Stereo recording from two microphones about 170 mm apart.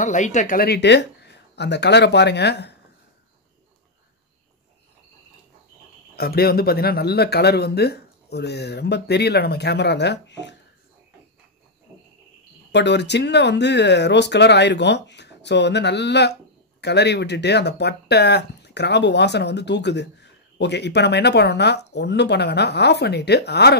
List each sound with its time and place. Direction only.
0.0 s speech: 45° left (ahead or behind); by 2.7 s 80° left
6.1 s speech: 65° left (ahead or behind); by 10.5 s 90° left
12.7 s speech: 90° left; by 23.8 s 75° left (ahead or behind)